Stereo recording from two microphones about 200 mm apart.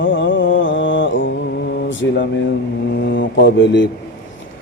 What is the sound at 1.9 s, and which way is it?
A man's voice, 65° left (ahead or behind).